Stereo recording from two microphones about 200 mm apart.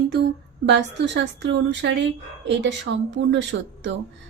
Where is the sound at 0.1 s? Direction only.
55° right (ahead or behind).